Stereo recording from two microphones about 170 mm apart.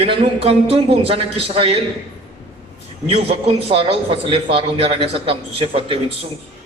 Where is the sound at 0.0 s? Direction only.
35° right (ahead or behind).